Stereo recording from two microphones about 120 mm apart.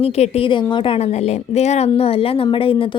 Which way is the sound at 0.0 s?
55° left (ahead or behind).